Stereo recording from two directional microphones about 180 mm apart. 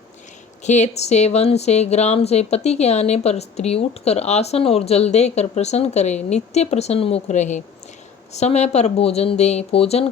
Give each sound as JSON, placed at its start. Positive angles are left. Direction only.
{"t": 0.6, "sound": "speech", "side_deg": 40}